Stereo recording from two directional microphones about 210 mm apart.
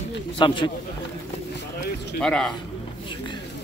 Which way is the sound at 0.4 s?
20° left (ahead or behind).